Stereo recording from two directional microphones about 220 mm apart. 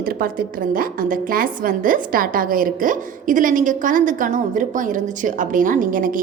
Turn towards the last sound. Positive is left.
turn(degrees=-40)  # may be behind; listen again after turning